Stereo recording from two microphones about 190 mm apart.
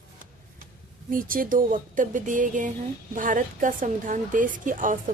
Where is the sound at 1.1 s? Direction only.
45° right (ahead or behind).